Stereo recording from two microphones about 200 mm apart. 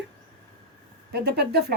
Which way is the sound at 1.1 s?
55° right (ahead or behind).